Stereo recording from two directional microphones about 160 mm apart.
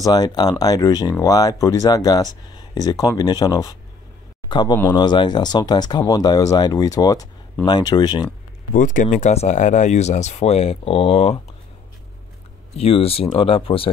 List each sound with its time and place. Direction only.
0.0 s speech: 25° left (ahead or behind)
8.7 s speech: 55° left (ahead or behind); by 11.3 s 35° left (ahead or behind)
12.7 s speech: 35° left (ahead or behind)